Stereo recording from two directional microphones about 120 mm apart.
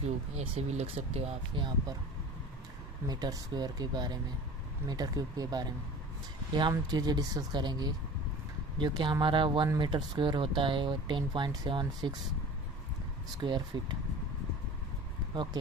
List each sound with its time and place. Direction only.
0.0 s speech: 60° right (ahead or behind)
1.6 s speech: 45° right (ahead or behind)
3.1 s speech: 35° right (ahead or behind)
6.7 s speech: 35° right (ahead or behind)
13.4 s speech: 40° right (ahead or behind)